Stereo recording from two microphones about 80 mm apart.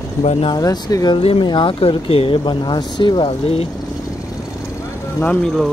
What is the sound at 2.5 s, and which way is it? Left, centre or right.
Speech, left.